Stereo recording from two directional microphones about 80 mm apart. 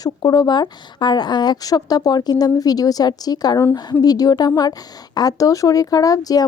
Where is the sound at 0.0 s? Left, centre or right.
Left.